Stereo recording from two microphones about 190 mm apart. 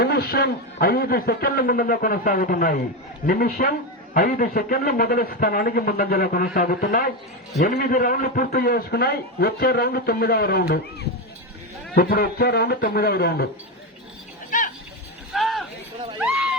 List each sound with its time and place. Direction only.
0.0 s a man's voice: 55° left (ahead or behind)
11.9 s a man's voice: 50° left (ahead or behind)
15.3 s a sound: centre (ahead or behind)